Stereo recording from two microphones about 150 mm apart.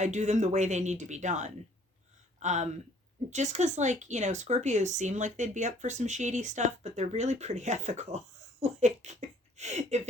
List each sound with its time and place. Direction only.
0.0 s speech: 50° right (ahead or behind)